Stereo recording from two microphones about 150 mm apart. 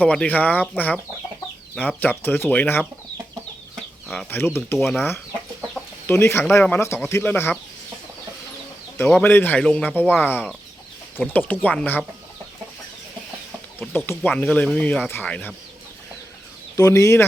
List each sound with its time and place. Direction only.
0.0 s speech: 10° left (ahead or behind)
4.1 s speech: 10° left (ahead or behind)
9.1 s speech: 10° left (ahead or behind)
14.3 s speech: 10° left (ahead or behind)
16.7 s speech: 20° left (ahead or behind)